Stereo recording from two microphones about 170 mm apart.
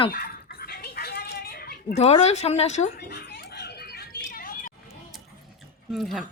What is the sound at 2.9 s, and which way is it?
Dog, 70° left (ahead or behind).